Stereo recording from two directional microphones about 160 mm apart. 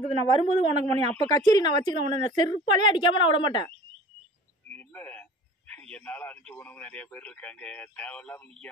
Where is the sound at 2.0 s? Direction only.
50° right (ahead or behind).